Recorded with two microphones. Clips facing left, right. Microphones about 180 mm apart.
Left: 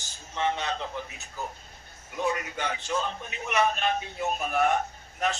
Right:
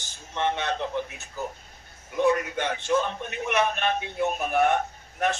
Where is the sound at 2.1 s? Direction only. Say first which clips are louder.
Right 7 dB; 55° right (ahead or behind).